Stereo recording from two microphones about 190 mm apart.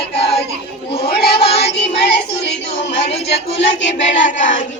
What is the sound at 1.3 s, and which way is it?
Music, 30° left (ahead or behind).